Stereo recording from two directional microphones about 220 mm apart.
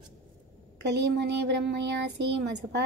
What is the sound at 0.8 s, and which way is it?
Speech, 50° right (ahead or behind).